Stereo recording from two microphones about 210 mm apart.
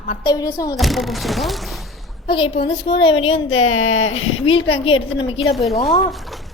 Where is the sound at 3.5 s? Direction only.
75° left (ahead or behind).